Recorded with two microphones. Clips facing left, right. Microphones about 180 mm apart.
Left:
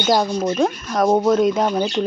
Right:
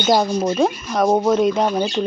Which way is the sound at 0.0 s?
5° right (ahead or behind).